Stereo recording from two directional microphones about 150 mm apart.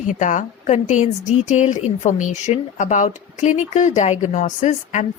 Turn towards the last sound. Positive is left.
turn(degrees=55)  # may be behind; listen again after turning